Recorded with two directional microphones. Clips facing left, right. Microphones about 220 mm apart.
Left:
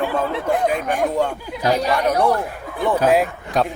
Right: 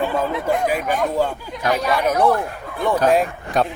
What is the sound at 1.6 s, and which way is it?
Speech, 30° left (ahead or behind).